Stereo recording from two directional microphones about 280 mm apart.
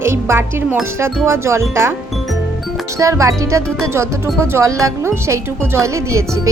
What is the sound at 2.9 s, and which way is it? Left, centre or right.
Speech, centre.